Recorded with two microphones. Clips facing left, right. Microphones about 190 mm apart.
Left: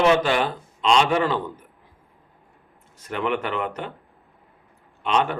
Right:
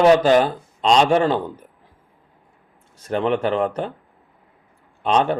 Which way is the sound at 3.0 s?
30° right (ahead or behind).